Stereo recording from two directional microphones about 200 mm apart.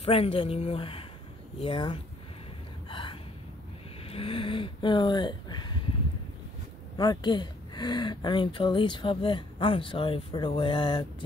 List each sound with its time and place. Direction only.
0.0 s speech: 30° left (ahead or behind)
2.9 s gasp: 25° left (ahead or behind)
4.1 s speech: 25° left (ahead or behind)
7.0 s speech: 20° left (ahead or behind)